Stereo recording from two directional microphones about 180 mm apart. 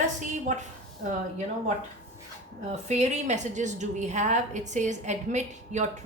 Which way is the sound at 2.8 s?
40° right (ahead or behind).